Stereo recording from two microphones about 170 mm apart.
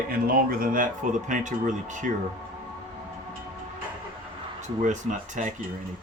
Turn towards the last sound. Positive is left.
turn(degrees=-45)  # may be behind; listen again after turning